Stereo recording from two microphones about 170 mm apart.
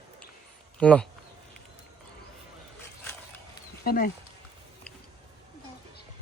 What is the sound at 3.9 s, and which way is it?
Speech, 60° left (ahead or behind).